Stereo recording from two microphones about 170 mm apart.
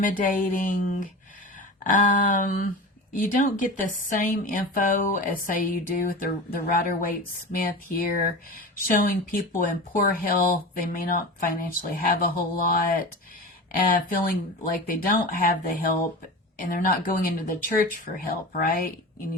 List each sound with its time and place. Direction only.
0.0 s speech: 50° left (ahead or behind)
7.5 s speech: 55° left (ahead or behind)